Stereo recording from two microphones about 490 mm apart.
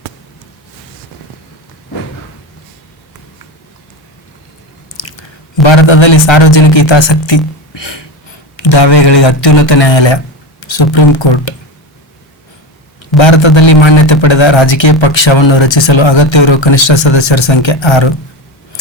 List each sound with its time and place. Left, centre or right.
5.6 s a man's voice: left
13.1 s a man's voice: left